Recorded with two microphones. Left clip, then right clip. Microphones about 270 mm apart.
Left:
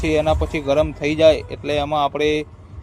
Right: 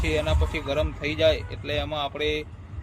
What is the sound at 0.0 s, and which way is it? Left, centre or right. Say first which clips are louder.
Speech: left 8 dB; left.